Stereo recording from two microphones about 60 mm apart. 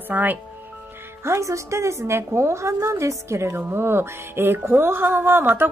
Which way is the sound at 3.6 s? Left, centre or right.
Right.